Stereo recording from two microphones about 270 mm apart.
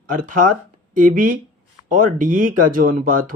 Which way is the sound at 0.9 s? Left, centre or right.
Right.